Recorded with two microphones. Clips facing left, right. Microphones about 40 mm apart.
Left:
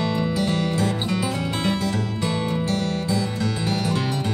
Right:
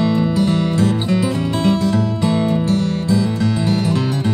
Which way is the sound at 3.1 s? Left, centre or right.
Centre.